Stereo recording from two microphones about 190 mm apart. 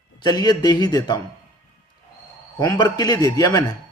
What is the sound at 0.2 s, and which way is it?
Speech, 20° left (ahead or behind).